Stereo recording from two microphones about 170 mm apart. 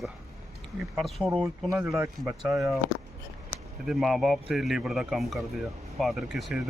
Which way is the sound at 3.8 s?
Centre (ahead or behind).